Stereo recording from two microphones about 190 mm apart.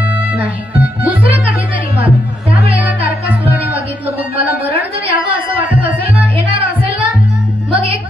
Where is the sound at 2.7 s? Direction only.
10° right (ahead or behind).